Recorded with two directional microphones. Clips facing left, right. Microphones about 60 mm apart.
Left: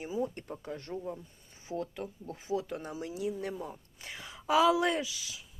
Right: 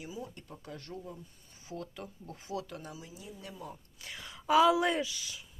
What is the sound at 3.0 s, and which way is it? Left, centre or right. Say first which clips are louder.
Speech: left 12 dB; left.